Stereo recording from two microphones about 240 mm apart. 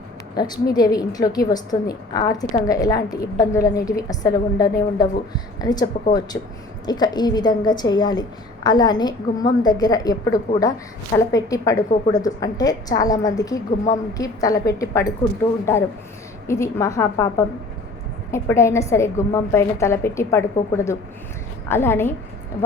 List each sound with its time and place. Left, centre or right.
0.3 s a woman's voice: centre
16.5 s a woman's voice: centre